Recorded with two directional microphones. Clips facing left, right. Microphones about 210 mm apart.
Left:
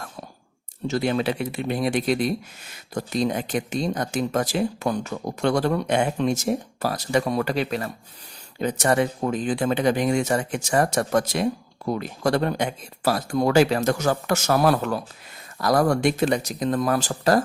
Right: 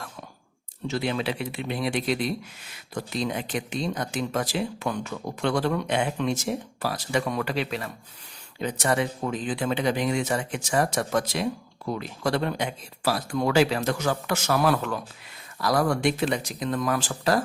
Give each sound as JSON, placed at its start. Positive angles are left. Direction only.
{"t": 0.9, "sound": "speech", "side_deg": 40}